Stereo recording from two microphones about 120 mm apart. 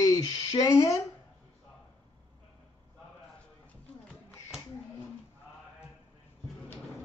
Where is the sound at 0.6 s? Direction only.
30° left (ahead or behind).